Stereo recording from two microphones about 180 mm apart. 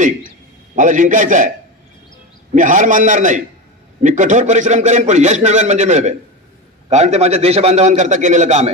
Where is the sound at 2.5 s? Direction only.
45° right (ahead or behind).